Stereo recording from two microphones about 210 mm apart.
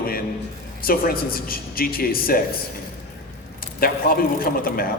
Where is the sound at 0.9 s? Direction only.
45° left (ahead or behind).